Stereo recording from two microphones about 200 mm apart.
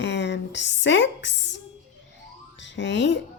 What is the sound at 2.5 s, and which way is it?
Music, 65° left (ahead or behind).